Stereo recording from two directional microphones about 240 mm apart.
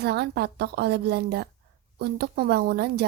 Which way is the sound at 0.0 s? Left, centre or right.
Right.